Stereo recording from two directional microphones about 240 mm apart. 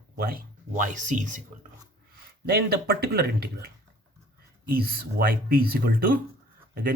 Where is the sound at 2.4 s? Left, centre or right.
Right.